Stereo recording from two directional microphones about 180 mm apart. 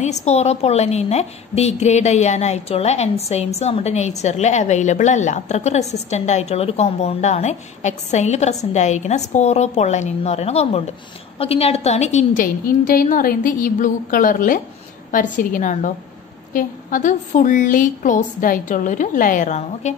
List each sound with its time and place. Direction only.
0.0 s a woman's voice: 40° left (ahead or behind)